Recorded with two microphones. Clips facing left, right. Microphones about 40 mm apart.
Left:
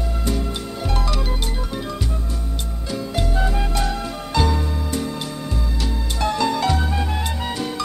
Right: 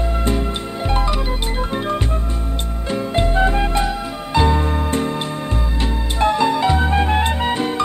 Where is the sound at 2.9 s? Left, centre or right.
Right.